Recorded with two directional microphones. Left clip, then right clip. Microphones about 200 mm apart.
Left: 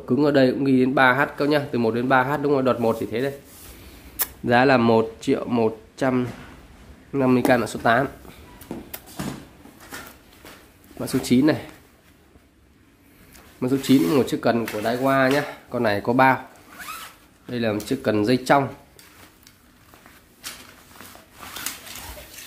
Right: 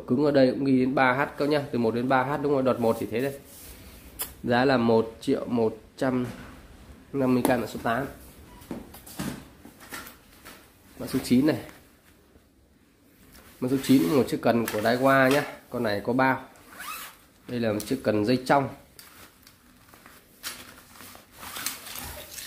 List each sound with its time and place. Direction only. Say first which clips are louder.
0.0 s speech: left 3 dB; 10° left (ahead or behind)
8.7 s a sound: left 3 dB; 10° left (ahead or behind)
11.0 s speech: left 4 dB; 15° left (ahead or behind)
13.6 s speech: left 3 dB; 10° left (ahead or behind)
14.8 s speech: right 1 dB; 15° right (ahead or behind)
15.7 s speech: left 6 dB; 15° left (ahead or behind)
17.5 s speech: left 3 dB; 5° left (ahead or behind)